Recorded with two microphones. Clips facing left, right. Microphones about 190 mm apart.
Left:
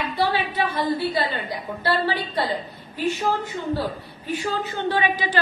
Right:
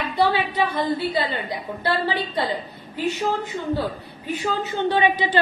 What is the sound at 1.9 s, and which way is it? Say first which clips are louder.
Speech: even; 20° right (ahead or behind).